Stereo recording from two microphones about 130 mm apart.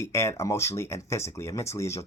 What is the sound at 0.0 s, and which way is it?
Speech, 20° left (ahead or behind).